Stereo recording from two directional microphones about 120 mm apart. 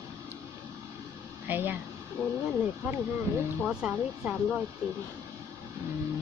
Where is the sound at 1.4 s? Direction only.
15° right (ahead or behind).